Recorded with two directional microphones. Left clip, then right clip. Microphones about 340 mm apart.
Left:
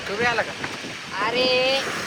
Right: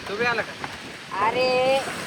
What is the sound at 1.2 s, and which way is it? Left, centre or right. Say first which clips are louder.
Vehicle: even; right.